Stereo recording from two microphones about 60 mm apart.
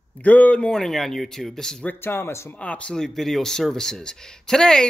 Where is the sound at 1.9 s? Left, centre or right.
Left.